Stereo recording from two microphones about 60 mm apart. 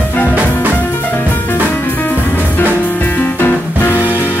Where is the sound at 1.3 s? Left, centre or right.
Left.